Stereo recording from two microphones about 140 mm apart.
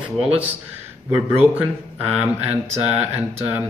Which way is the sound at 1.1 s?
10° right (ahead or behind).